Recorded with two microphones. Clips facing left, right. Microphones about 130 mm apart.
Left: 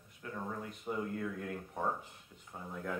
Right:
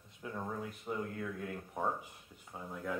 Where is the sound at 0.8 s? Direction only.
Centre (ahead or behind).